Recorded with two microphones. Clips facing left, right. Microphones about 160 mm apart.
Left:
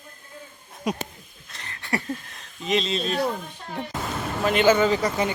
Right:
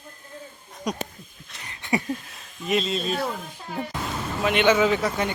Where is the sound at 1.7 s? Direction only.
15° right (ahead or behind).